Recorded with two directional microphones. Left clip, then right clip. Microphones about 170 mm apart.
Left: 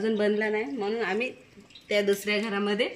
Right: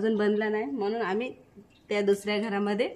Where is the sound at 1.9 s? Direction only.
25° right (ahead or behind).